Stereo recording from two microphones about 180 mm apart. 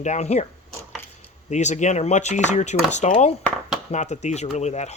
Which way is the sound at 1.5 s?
40° left (ahead or behind).